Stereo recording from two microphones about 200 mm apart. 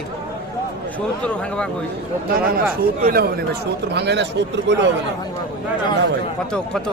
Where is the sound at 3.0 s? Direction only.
50° right (ahead or behind).